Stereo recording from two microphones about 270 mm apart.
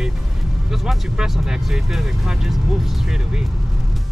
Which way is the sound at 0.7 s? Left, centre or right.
Centre.